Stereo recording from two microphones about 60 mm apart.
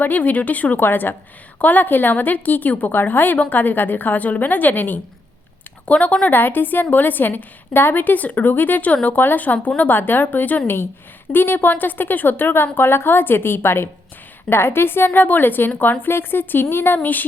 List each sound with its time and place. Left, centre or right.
0.0 s a woman's voice: left